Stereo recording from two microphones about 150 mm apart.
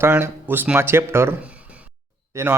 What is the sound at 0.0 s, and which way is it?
A man's voice, 15° right (ahead or behind).